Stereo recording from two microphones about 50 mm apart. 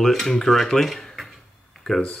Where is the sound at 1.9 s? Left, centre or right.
Centre.